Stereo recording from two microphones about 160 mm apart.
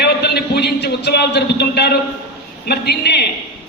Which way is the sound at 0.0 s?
90° left.